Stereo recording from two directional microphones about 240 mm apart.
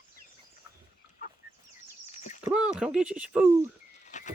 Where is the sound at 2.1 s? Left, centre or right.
Left.